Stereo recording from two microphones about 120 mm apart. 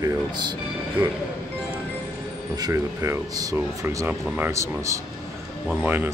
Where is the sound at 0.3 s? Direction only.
40° right (ahead or behind).